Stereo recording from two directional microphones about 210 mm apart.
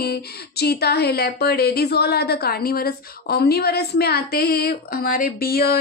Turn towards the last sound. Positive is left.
turn(degrees=45)  # may be behind; listen again after turning